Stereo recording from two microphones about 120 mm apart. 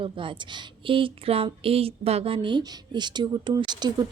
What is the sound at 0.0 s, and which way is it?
A woman's voice, 45° right (ahead or behind).